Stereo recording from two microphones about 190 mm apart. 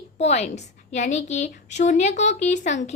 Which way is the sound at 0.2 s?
35° left (ahead or behind).